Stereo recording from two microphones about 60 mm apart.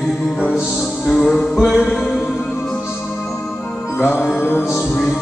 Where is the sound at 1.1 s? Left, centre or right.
Centre.